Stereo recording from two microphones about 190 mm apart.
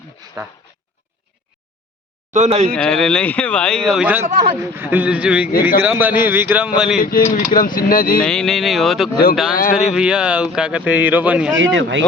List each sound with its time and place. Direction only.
0.4 s speech: 20° right (ahead or behind)
2.3 s speech: 35° right (ahead or behind)
2.7 s a man's voice: 5° left (ahead or behind)
7.0 s speech: 45° left (ahead or behind)
8.2 s speech: 5° left (ahead or behind)
9.5 s speech: 45° left (ahead or behind)
9.9 s speech: 5° right (ahead or behind)
11.5 s speech: 80° right